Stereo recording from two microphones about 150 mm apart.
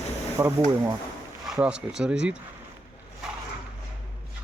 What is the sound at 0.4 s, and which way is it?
Speech, 20° right (ahead or behind).